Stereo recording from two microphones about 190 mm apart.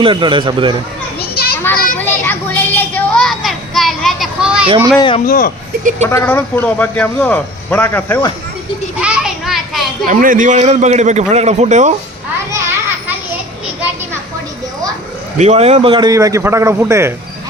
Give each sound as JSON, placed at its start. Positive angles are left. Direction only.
{"t": 0.0, "sound": "a man's voice", "side_deg": -25}
{"t": 1.2, "sound": "children playing", "side_deg": 55}
{"t": 2.0, "sound": "a sound", "side_deg": 10}
{"t": 4.9, "sound": "speech", "side_deg": 25}
{"t": 5.2, "sound": "speech", "side_deg": 45}
{"t": 6.0, "sound": "a man's voice", "side_deg": 15}
{"t": 9.0, "sound": "children playing", "side_deg": -5}
{"t": 10.1, "sound": "a man's voice", "side_deg": -45}
{"t": 15.4, "sound": "a man's voice", "side_deg": -35}